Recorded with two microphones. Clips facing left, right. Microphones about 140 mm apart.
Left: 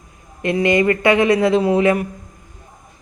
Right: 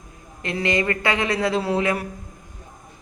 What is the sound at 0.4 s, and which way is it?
Speech, 20° left (ahead or behind).